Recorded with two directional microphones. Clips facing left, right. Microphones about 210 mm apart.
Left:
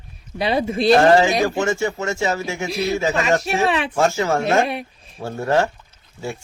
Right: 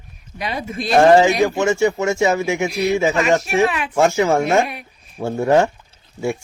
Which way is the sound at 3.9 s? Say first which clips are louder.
Right 3 dB; 15° right (ahead or behind).